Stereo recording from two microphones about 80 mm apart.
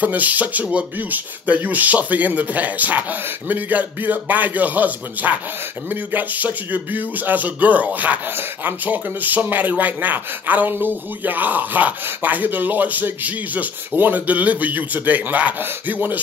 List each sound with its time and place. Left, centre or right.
0.0 s speech: right